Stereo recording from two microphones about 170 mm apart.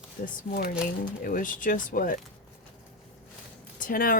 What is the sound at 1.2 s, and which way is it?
Speech, 55° left (ahead or behind).